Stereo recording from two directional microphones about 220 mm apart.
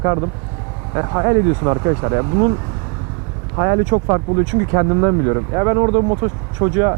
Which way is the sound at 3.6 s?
20° right (ahead or behind).